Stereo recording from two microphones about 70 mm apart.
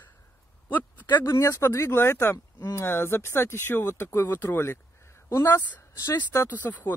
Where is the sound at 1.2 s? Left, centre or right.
Left.